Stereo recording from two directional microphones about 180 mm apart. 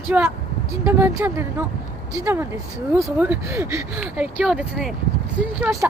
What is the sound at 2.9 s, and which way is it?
Speech, 10° right (ahead or behind).